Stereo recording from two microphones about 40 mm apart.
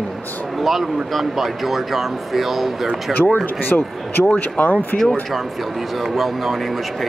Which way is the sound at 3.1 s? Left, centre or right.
Left.